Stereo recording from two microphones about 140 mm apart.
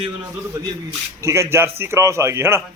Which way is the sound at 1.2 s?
20° right (ahead or behind).